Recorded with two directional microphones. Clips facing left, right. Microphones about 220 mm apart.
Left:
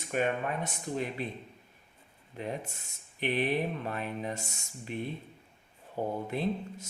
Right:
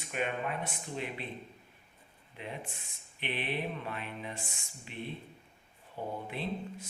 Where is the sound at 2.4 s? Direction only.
40° left (ahead or behind).